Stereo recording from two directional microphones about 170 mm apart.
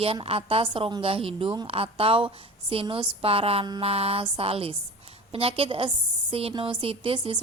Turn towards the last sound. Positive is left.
turn(degrees=-35)  # may be behind; listen again after turning